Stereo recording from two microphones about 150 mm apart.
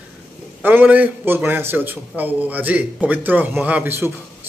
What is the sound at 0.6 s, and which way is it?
A man's voice, 10° right (ahead or behind).